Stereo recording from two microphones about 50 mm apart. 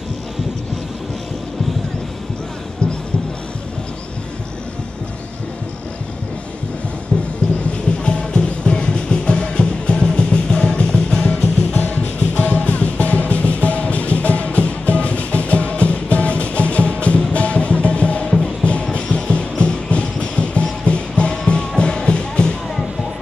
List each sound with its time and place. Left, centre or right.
8.0 s music: centre
11.7 s music: left